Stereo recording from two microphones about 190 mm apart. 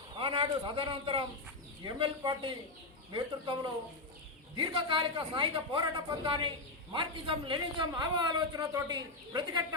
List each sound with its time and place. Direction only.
0.2 s a man's voice: 25° right (ahead or behind)